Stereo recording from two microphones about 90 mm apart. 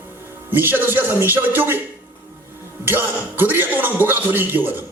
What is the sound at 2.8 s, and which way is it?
A man's voice, 20° right (ahead or behind).